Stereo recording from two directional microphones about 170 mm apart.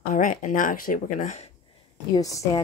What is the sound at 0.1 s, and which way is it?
Speech, 50° left (ahead or behind).